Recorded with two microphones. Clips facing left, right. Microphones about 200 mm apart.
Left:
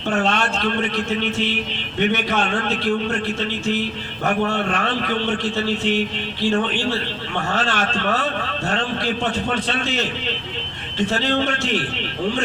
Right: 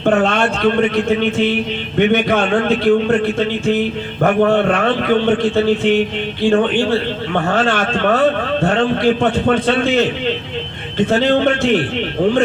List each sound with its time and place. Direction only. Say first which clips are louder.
0.0 s speech: right 7 dB; 55° right (ahead or behind)